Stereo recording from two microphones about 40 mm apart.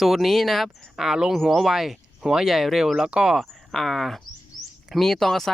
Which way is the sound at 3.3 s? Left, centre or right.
Centre.